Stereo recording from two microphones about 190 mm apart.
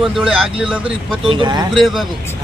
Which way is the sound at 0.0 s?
5° right (ahead or behind).